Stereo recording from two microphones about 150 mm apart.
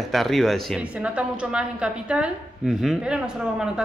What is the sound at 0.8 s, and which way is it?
A woman's voice, 10° right (ahead or behind).